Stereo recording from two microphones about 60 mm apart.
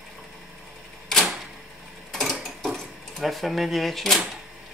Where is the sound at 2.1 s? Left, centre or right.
Centre.